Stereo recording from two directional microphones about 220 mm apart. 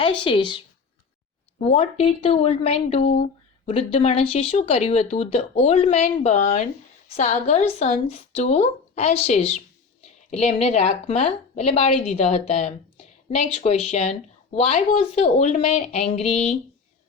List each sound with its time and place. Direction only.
0.2 s speech: 20° left (ahead or behind)